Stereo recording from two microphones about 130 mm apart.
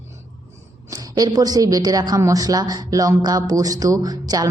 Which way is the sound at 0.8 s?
25° right (ahead or behind).